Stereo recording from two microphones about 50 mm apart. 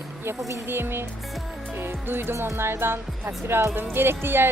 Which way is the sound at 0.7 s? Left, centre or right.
Right.